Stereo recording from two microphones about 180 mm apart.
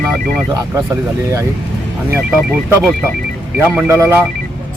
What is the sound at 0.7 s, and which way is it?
Speech, 15° right (ahead or behind).